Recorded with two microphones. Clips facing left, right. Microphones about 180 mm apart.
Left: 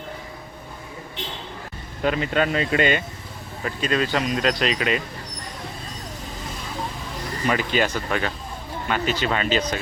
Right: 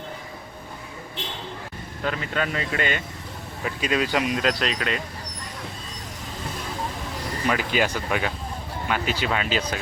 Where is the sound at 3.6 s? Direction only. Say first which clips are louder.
Left 1 dB; 5° right (ahead or behind).